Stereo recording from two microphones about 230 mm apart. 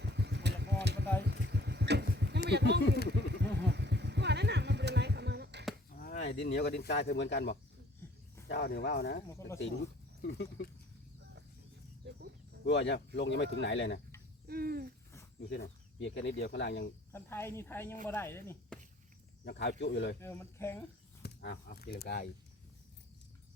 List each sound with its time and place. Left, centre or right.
0.0 s vehicle: right
1.2 s a sound: right
2.5 s speech: right
3.3 s a sound: right
6.0 s speech: left
10.2 s speech: left
12.0 s a sound: right
12.6 s speech: left
14.4 s hoot: right
15.4 s speech: left
17.1 s a woman's voice: centre
19.5 s speech: left
20.1 s a woman's voice: centre
21.2 s speech: left